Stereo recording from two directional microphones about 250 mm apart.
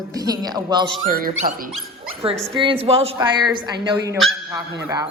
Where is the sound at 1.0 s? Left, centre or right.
Right.